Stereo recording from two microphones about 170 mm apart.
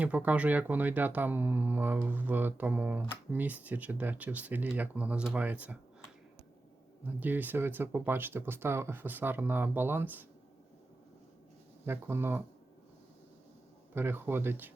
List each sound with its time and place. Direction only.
0.0 s speech: 10° right (ahead or behind)
7.2 s speech: 10° right (ahead or behind)
11.9 s speech: 15° right (ahead or behind)
13.9 s speech: 15° right (ahead or behind)